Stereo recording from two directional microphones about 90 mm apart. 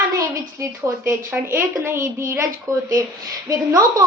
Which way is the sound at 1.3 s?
30° right (ahead or behind).